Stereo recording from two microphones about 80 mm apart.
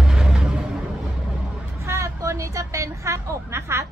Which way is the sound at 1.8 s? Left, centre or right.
Right.